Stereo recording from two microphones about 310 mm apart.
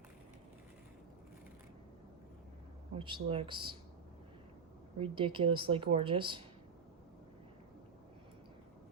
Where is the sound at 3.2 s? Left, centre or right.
Centre.